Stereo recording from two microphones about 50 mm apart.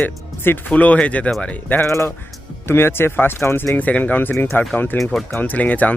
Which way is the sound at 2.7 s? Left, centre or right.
Left.